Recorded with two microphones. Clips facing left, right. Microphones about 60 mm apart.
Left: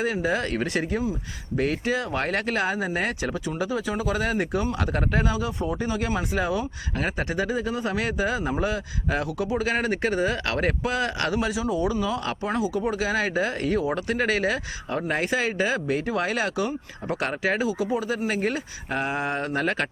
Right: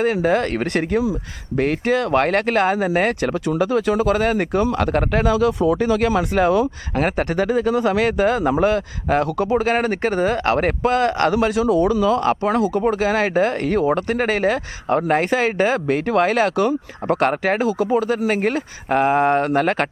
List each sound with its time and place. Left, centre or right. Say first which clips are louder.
0.0 s speech: right 7 dB; right
1.5 s speech: right 6 dB; right
6.9 s speech: right 7 dB; right
11.3 s speech: right 8 dB; right
12.2 s speech: right 10 dB; right
12.5 s speech: right 7 dB; right